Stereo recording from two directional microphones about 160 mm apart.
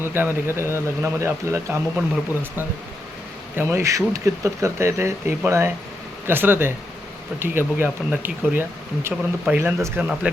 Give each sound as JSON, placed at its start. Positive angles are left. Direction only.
{"t": 0.0, "sound": "speech", "side_deg": -15}